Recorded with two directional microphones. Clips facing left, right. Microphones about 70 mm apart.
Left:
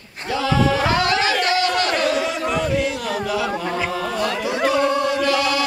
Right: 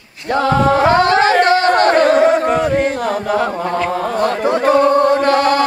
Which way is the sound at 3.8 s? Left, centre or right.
Right.